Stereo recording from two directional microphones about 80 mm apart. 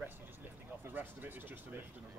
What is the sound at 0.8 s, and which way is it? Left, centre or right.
Speech, right.